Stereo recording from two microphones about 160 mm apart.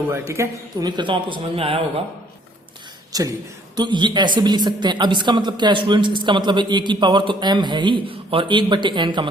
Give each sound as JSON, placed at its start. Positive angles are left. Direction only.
{"t": 0.1, "sound": "speech", "side_deg": -15}
{"t": 3.1, "sound": "speech", "side_deg": -20}